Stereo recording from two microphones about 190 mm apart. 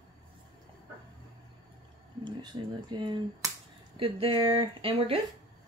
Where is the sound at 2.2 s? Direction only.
25° right (ahead or behind).